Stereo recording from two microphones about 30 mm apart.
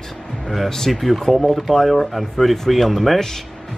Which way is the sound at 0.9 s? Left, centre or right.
Centre.